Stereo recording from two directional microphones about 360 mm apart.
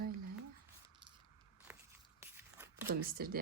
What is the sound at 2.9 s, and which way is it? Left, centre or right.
Speech, right.